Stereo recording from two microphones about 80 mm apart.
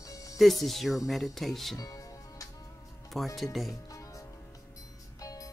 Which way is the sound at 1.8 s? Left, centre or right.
Left.